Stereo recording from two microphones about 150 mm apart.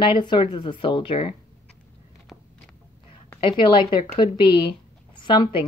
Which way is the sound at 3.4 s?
35° left (ahead or behind).